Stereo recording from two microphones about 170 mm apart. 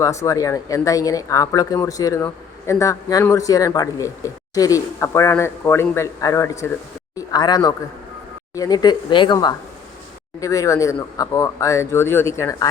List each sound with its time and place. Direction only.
0.0 s speech: 20° left (ahead or behind)